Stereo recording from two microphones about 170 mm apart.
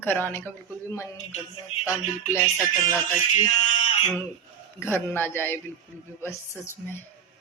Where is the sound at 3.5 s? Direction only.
40° left (ahead or behind).